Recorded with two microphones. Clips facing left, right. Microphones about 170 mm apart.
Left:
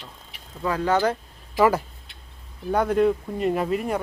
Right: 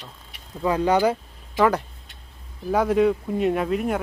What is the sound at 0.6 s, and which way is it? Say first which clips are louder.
Speech: right 2 dB; 20° right (ahead or behind).